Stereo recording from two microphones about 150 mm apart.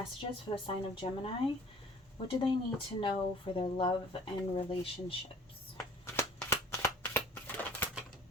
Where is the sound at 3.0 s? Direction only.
35° left (ahead or behind).